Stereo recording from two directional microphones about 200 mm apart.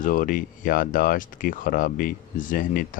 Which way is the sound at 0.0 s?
40° left (ahead or behind).